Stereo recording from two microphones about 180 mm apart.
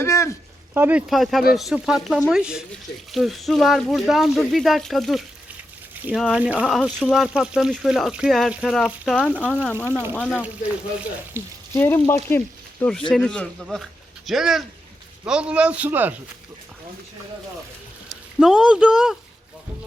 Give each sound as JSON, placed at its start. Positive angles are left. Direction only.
{"t": 0.0, "sound": "a sound", "side_deg": 15}
{"t": 0.7, "sound": "a man's voice", "side_deg": -10}
{"t": 11.3, "sound": "a man's voice", "side_deg": -10}
{"t": 11.7, "sound": "speech", "side_deg": 10}
{"t": 13.1, "sound": "a man's voice", "side_deg": 5}
{"t": 18.3, "sound": "speech", "side_deg": -5}